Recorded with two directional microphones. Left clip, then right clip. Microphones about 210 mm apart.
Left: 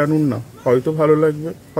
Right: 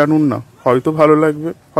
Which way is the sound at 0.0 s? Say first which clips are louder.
Right 4 dB; 45° right (ahead or behind).